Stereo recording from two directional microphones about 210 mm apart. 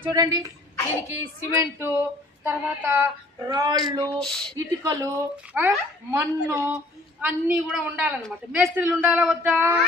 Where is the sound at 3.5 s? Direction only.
20° right (ahead or behind).